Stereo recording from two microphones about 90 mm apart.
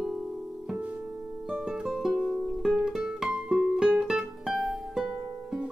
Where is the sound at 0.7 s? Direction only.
20° right (ahead or behind).